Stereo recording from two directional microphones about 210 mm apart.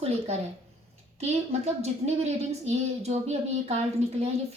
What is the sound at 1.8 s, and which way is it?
A woman's voice, 30° right (ahead or behind).